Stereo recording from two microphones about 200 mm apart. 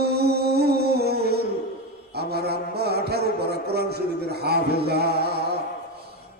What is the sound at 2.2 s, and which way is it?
A man's voice, 55° right (ahead or behind).